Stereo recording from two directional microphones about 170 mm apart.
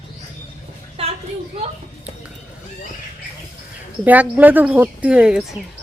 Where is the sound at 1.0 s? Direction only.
35° right (ahead or behind).